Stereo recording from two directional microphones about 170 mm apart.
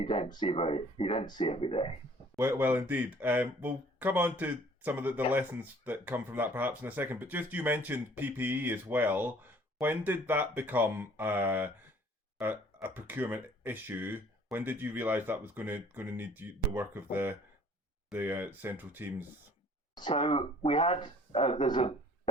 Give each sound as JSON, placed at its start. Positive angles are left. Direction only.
{"t": 0.0, "sound": "speech", "side_deg": 30}
{"t": 2.4, "sound": "speech", "side_deg": -15}
{"t": 12.9, "sound": "speech", "side_deg": -10}
{"t": 20.0, "sound": "speech", "side_deg": 25}